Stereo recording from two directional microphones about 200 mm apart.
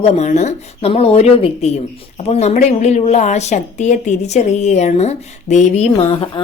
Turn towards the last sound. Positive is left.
turn(degrees=30)  # may be behind; listen again after turning